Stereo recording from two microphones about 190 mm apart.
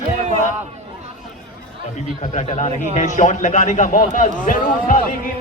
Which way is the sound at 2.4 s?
35° left (ahead or behind).